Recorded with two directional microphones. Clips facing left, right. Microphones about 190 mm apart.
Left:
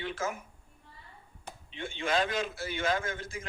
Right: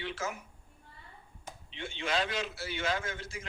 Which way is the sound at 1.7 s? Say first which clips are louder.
Left 3 dB; 50° left (ahead or behind).